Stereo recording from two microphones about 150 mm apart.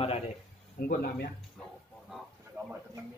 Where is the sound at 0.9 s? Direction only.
90° left.